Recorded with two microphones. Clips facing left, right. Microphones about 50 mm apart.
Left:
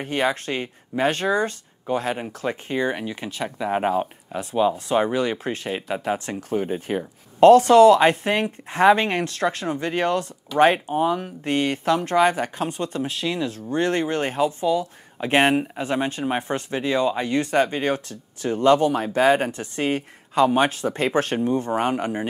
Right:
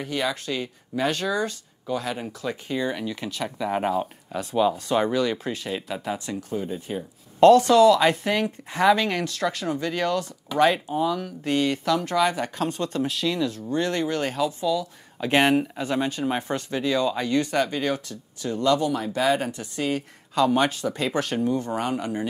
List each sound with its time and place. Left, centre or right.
0.0 s speech: left
5.5 s speech: left
5.8 s speech: left
6.5 s speech: left
12.6 s speech: left